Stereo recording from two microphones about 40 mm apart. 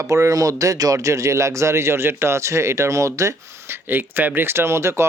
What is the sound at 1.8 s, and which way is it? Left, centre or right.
Speech, right.